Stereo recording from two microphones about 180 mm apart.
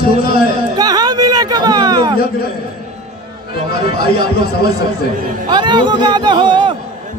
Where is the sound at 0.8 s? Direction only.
20° right (ahead or behind).